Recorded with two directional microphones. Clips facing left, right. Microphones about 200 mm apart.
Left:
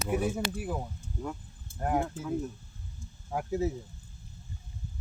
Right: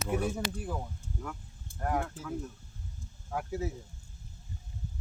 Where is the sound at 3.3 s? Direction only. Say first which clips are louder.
Left 4 dB; 20° left (ahead or behind).